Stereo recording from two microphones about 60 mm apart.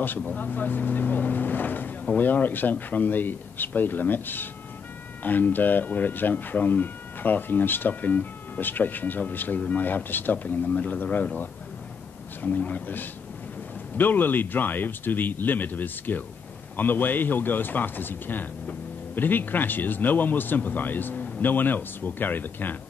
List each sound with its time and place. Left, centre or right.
0.3 s speech: left